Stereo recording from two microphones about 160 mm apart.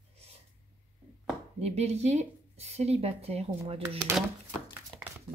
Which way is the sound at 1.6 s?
40° right (ahead or behind).